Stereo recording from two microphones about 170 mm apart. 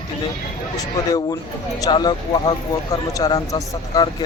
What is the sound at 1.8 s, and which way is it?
A man's voice, 25° left (ahead or behind).